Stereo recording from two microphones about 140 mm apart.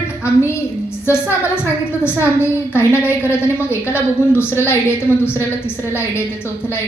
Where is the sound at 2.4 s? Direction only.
15° left (ahead or behind).